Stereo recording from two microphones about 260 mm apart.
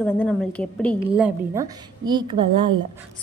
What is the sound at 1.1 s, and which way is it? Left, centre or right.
A woman's voice, centre.